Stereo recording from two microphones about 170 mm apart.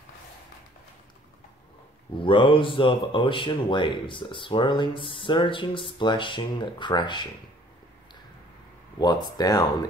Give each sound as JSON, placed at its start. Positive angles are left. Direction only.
{"t": 2.1, "sound": "speech", "side_deg": 30}
{"t": 8.9, "sound": "speech", "side_deg": 25}